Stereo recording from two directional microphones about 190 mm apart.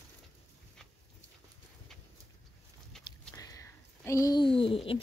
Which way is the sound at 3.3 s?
20° left (ahead or behind).